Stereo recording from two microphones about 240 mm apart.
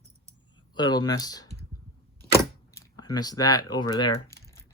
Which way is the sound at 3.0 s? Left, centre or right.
Centre.